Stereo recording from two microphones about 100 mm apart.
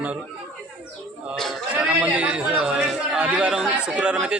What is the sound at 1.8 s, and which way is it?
A man's voice, 15° right (ahead or behind).